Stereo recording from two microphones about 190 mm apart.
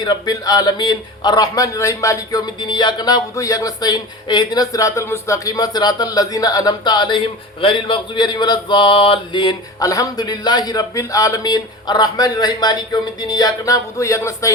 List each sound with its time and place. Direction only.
0.0 s speech: 20° left (ahead or behind)